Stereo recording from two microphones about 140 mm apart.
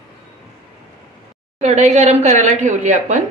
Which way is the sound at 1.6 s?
55° right (ahead or behind).